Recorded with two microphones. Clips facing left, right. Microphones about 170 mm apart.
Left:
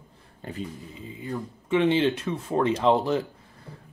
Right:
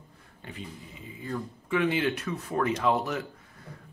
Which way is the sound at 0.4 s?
40° left (ahead or behind).